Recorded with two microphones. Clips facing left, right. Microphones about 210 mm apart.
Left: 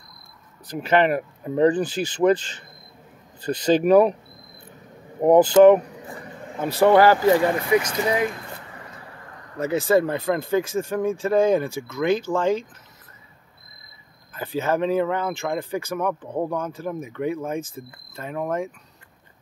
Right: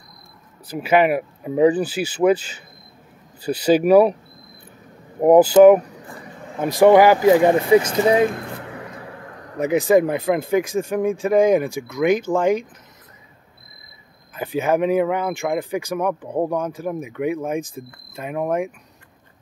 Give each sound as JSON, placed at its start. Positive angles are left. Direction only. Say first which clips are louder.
{"t": 0.7, "sound": "speech", "louder": "right 3 dB", "side_deg": -5}
{"t": 5.2, "sound": "speech", "louder": "right 3 dB", "side_deg": -10}
{"t": 7.7, "sound": "speech", "louder": "right 6 dB", "side_deg": -30}
{"t": 8.6, "sound": "a sound", "louder": "right 8 dB", "side_deg": -65}
{"t": 9.6, "sound": "speech", "louder": "right 4 dB", "side_deg": -15}
{"t": 14.3, "sound": "speech", "louder": "right 4 dB", "side_deg": -15}